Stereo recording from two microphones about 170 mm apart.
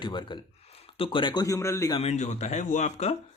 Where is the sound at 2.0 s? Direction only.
40° left (ahead or behind).